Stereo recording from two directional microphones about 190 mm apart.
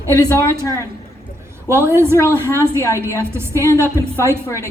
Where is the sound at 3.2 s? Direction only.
15° right (ahead or behind).